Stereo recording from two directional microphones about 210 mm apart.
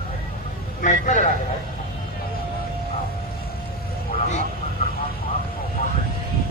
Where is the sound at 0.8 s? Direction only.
35° left (ahead or behind).